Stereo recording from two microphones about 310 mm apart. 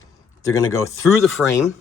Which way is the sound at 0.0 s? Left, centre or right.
Left.